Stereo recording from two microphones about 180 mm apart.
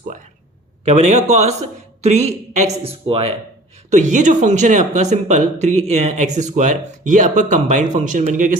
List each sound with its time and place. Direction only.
0.9 s speech: 40° right (ahead or behind)